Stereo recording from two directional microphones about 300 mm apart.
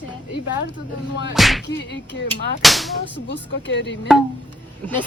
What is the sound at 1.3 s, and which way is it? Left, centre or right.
Music, centre.